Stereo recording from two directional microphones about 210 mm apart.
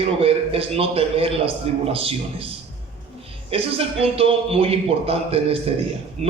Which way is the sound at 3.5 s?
25° right (ahead or behind).